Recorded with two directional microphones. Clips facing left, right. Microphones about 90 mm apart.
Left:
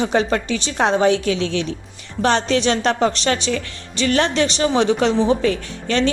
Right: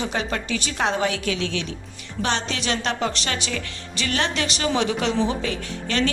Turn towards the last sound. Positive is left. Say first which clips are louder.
# left 4 dB
turn(degrees=35)  # may be behind; listen again after turning